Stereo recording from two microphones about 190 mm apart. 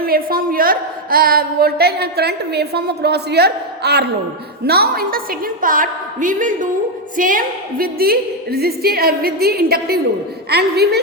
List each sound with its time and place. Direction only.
0.0 s a woman's voice: 50° right (ahead or behind)